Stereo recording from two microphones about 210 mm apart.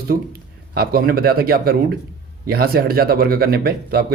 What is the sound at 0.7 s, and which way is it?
Speech, 45° right (ahead or behind).